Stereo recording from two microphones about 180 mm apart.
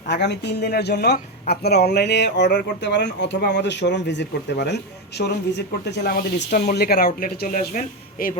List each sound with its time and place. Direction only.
0.1 s speech: 70° left (ahead or behind); by 8.3 s 50° left (ahead or behind)